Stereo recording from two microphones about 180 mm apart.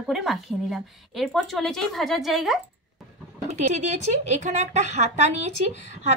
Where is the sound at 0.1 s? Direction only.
Centre (ahead or behind).